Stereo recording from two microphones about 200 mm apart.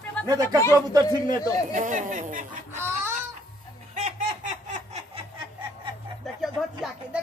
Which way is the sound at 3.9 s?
35° right (ahead or behind).